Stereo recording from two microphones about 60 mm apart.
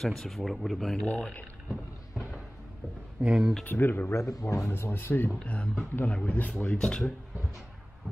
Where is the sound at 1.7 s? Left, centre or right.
Centre.